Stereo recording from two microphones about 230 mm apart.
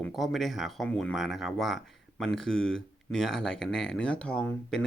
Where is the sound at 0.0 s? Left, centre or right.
Centre.